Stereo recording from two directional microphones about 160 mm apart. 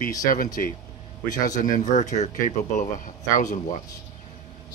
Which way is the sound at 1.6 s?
50° left (ahead or behind).